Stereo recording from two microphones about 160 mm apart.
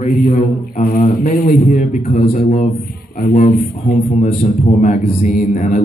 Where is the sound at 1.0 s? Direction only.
50° left (ahead or behind).